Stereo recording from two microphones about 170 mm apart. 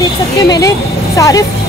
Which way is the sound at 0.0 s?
20° left (ahead or behind).